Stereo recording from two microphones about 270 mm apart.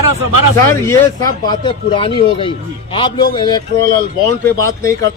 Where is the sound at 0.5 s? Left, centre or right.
Centre.